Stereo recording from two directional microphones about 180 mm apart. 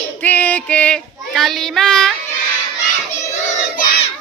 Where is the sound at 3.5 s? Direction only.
45° left (ahead or behind).